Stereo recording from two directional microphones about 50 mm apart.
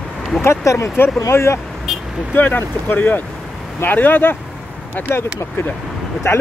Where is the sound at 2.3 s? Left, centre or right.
Left.